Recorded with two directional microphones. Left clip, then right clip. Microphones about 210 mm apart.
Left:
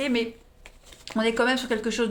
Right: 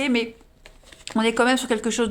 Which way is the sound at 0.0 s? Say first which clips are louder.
Right 3 dB; 35° right (ahead or behind).